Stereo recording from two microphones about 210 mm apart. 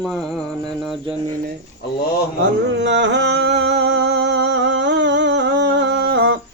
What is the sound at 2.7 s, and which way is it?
Music, 60° right (ahead or behind).